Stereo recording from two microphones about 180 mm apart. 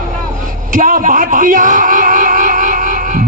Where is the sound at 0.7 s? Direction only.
50° right (ahead or behind).